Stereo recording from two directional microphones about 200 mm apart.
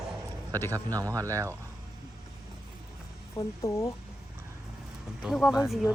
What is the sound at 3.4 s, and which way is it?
Speech, 15° left (ahead or behind).